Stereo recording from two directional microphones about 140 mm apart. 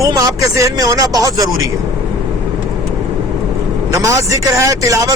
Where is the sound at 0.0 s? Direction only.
25° right (ahead or behind).